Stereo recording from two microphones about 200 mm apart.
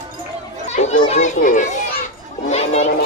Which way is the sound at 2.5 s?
30° left (ahead or behind).